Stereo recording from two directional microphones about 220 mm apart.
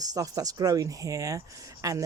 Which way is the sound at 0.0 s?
15° right (ahead or behind).